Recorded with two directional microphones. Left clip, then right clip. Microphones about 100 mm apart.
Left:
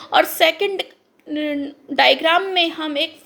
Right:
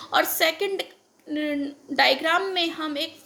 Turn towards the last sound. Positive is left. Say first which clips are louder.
# left 7 dB
turn(degrees=35)  # may be behind; listen again after turning